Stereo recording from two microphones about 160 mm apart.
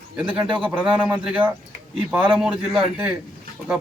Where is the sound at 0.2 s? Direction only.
5° right (ahead or behind).